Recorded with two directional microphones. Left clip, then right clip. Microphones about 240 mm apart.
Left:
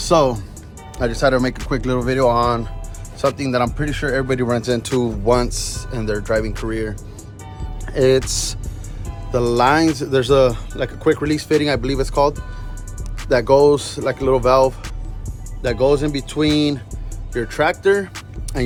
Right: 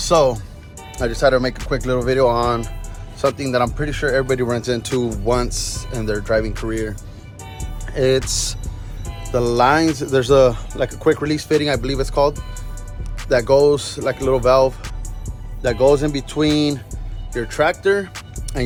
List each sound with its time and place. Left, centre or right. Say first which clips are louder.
0.0 s speech: even; centre
4.9 s speech: left 1 dB; centre
5.2 s speech: left 2 dB; centre
13.3 s speech: left 1 dB; centre
18.5 s music: left 1 dB; centre